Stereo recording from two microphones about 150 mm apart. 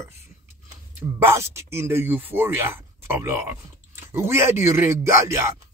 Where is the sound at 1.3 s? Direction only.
20° right (ahead or behind).